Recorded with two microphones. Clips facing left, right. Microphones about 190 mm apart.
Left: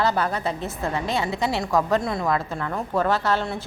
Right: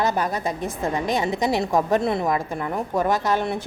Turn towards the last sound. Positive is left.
turn(degrees=-15)  # may be behind; listen again after turning